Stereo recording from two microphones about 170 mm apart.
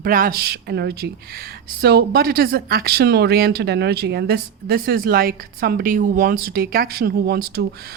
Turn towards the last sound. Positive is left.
turn(degrees=-70)  # may be behind; listen again after turning